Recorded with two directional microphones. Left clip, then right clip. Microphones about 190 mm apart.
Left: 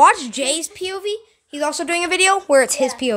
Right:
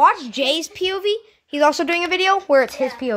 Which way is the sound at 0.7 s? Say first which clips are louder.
Right 4 dB; 40° right (ahead or behind).